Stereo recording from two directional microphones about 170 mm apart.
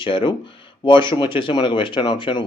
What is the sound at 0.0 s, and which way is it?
Speech, 30° left (ahead or behind).